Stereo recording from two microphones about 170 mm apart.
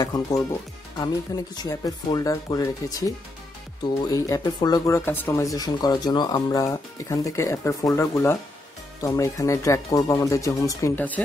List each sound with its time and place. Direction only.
0.0 s speech: 20° left (ahead or behind)
1.6 s speech: 25° left (ahead or behind)